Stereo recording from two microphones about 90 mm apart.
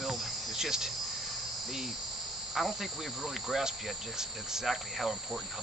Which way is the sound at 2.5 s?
Centre (ahead or behind).